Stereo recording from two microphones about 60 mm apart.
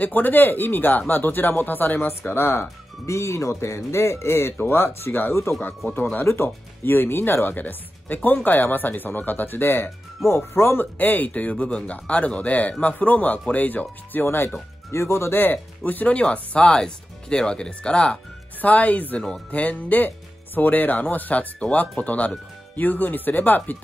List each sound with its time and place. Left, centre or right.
0.0 s speech: left
3.1 s speech: left
10.8 s speech: left
14.2 s speech: left
14.9 s speech: left; by 18.2 s centre
18.6 s speech: left